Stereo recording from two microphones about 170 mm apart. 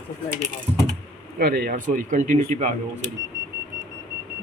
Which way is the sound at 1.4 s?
60° right (ahead or behind).